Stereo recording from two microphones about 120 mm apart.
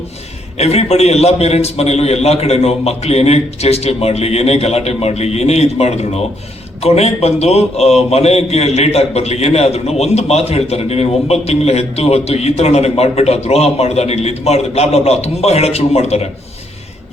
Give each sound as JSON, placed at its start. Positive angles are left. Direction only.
{"t": 0.6, "sound": "a man's voice", "side_deg": 60}